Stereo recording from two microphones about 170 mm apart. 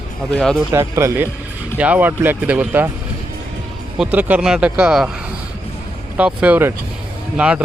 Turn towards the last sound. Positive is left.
turn(degrees=-5)  # may be behind; listen again after turning